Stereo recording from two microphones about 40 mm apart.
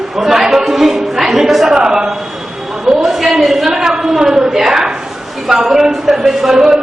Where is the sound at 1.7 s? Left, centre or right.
Centre.